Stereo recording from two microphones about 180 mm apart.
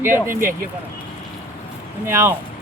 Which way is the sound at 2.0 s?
15° right (ahead or behind).